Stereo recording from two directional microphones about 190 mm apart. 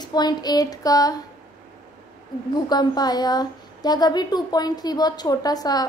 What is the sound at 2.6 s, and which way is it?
Speech, 20° left (ahead or behind).